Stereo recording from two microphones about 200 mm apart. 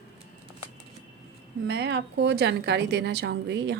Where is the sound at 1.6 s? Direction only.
60° right (ahead or behind).